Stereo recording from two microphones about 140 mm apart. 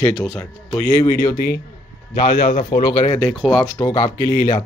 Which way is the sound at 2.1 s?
80° left.